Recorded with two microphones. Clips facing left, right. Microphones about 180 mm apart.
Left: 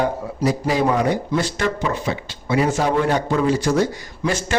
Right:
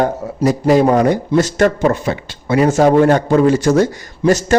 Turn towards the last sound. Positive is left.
turn(degrees=-45)  # may be behind; listen again after turning